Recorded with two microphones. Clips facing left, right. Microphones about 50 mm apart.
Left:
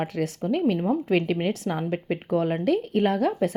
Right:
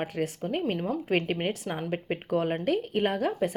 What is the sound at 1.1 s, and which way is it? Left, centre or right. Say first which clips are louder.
Speech: left 2 dB; right.